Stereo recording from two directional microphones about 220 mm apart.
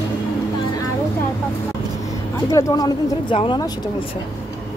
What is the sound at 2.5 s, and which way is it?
Speech, 15° left (ahead or behind).